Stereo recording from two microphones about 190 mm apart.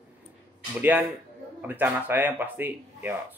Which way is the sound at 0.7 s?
10° right (ahead or behind).